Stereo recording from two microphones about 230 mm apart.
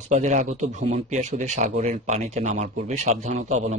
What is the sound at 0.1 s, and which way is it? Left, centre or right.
Speech, right.